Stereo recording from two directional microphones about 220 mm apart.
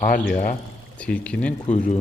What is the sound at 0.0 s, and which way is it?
Speech, 40° left (ahead or behind).